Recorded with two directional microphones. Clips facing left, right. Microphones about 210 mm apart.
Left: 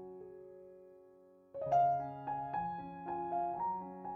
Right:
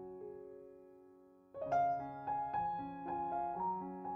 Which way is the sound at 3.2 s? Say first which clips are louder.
Left 4 dB; centre (ahead or behind).